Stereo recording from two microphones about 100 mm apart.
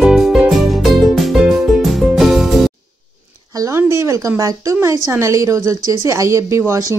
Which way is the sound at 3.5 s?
30° right (ahead or behind).